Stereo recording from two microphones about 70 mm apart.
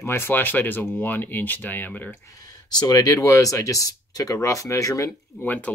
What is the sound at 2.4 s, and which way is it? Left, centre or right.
Speech, left.